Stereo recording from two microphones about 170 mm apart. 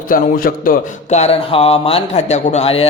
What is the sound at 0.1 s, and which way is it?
Speech, 55° left (ahead or behind).